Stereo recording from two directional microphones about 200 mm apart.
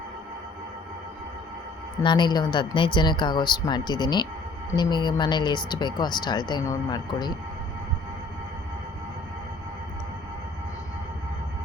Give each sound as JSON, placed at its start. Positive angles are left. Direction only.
{"t": 2.0, "sound": "speech", "side_deg": 20}